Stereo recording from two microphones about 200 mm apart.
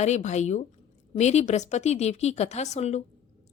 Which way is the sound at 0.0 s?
35° left (ahead or behind).